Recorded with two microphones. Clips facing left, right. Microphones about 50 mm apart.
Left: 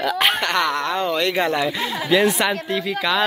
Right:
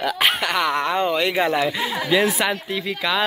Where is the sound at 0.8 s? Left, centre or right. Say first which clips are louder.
Right 1 dB; centre.